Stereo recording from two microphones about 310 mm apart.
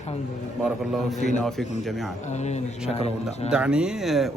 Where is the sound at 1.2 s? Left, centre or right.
Left.